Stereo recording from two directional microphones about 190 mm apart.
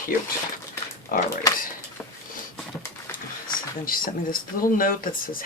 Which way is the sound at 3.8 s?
45° left (ahead or behind).